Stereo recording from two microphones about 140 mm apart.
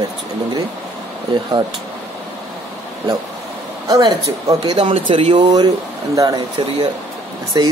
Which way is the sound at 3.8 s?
25° right (ahead or behind).